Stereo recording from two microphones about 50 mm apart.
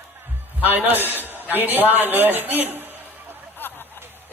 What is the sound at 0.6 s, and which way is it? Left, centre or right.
A man's voice, right.